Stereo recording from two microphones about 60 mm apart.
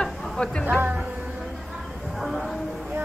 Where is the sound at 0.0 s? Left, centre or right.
Centre.